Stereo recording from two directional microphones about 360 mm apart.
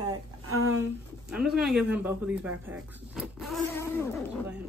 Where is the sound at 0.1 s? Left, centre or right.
Right.